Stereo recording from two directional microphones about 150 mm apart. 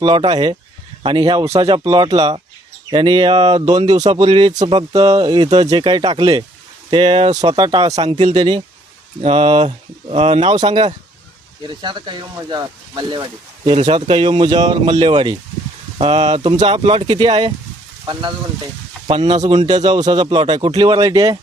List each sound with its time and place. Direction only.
0.0 s speech: 30° right (ahead or behind)
16.0 s speech: 45° right (ahead or behind); by 21.3 s 25° right (ahead or behind)